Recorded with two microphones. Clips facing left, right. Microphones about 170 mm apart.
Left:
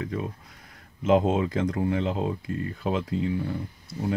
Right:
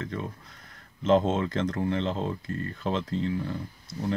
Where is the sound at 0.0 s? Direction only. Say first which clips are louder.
Left 3 dB; 10° left (ahead or behind).